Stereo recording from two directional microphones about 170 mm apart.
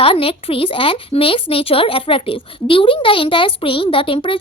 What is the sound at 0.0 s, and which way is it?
A woman's voice, 35° left (ahead or behind).